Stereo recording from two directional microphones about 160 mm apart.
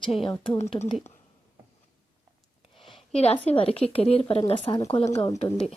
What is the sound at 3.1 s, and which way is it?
Speech, 35° left (ahead or behind).